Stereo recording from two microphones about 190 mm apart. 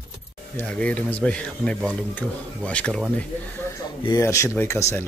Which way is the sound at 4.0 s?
20° left (ahead or behind).